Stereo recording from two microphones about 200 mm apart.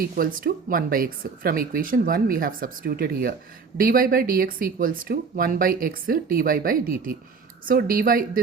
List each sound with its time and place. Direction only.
0.0 s speech: 45° right (ahead or behind)